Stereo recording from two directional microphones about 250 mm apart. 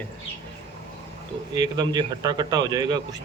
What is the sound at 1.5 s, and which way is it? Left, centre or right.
A man's voice, centre.